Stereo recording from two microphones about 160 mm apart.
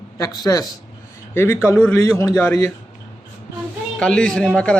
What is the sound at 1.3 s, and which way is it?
A man's voice, 15° left (ahead or behind).